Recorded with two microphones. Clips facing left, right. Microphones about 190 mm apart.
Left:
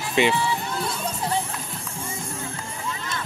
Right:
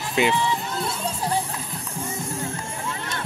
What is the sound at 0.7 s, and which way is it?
Music, 25° right (ahead or behind).